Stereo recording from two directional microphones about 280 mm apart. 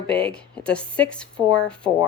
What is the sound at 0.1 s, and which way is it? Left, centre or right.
Speech, centre.